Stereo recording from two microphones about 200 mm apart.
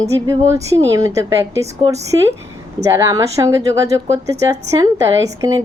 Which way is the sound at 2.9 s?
15° right (ahead or behind).